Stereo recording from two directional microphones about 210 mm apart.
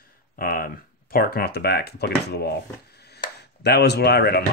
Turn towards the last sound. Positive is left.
turn(degrees=50)  # may be behind; listen again after turning